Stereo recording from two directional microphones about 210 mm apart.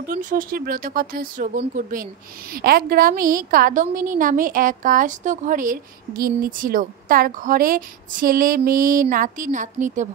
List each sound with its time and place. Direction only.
0.0 s a woman's voice: 40° right (ahead or behind)